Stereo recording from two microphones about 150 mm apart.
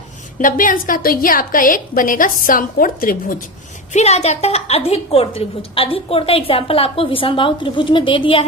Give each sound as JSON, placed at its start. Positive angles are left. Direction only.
{"t": 0.3, "sound": "a woman's voice", "side_deg": 65}
{"t": 3.9, "sound": "a woman's voice", "side_deg": 45}